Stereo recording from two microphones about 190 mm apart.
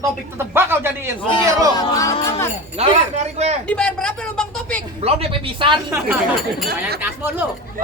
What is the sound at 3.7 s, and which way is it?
Speech, 5° left (ahead or behind).